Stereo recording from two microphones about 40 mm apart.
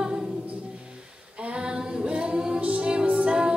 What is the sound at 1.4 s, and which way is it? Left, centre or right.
A capella, right.